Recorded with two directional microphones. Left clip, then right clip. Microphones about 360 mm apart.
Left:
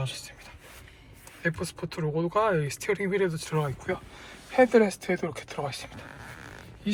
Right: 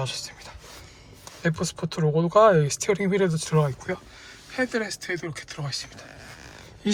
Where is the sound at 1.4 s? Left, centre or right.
Centre.